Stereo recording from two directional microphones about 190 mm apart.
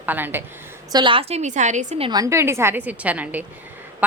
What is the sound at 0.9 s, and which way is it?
A woman's voice, 25° right (ahead or behind).